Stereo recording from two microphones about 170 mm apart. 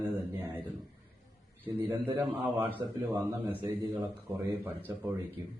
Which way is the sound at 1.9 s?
10° right (ahead or behind).